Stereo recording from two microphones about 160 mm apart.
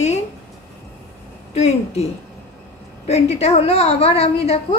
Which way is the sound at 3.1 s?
45° left (ahead or behind).